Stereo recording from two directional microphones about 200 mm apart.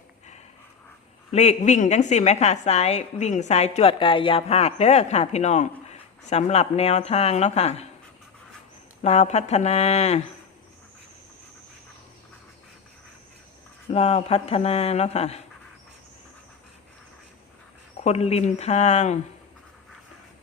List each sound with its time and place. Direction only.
1.3 s a woman's voice: 35° left (ahead or behind)
9.0 s a woman's voice: 35° left (ahead or behind)
13.9 s a woman's voice: 30° left (ahead or behind)
18.0 s a woman's voice: 35° left (ahead or behind)